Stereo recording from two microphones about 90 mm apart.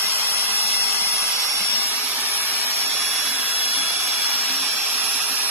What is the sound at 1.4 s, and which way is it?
Vacuum cleaner, 35° right (ahead or behind).